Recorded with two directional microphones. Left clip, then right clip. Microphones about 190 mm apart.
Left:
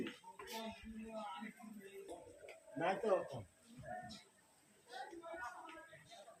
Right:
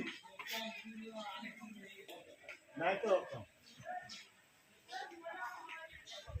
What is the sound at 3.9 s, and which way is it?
Music, 40° right (ahead or behind).